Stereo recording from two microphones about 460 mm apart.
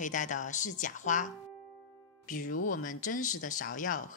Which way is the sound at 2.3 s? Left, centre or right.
Centre.